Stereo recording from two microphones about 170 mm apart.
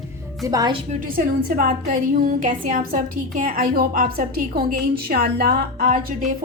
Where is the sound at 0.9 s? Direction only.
55° right (ahead or behind).